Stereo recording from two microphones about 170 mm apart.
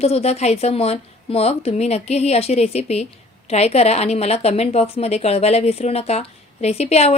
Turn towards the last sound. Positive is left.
turn(degrees=40)  # may be behind; listen again after turning